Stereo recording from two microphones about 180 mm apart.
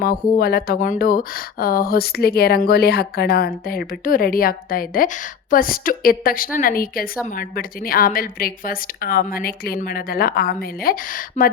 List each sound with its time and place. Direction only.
0.0 s speech: 55° left (ahead or behind)